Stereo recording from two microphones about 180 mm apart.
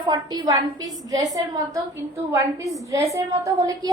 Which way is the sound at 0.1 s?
25° right (ahead or behind).